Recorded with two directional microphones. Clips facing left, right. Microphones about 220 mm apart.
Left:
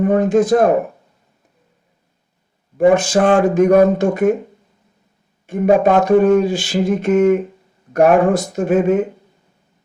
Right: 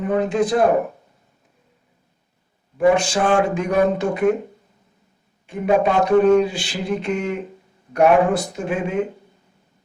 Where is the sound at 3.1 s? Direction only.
55° left (ahead or behind).